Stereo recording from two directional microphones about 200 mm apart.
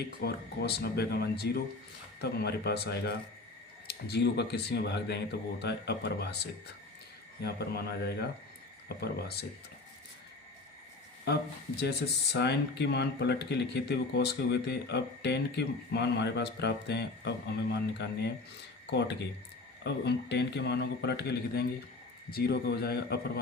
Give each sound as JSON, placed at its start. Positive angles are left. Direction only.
{"t": 0.2, "sound": "speech", "side_deg": 55}
{"t": 11.8, "sound": "speech", "side_deg": 55}